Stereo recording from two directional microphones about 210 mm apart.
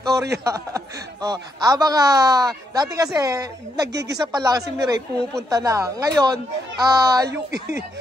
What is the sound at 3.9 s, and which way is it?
Speech, 55° right (ahead or behind).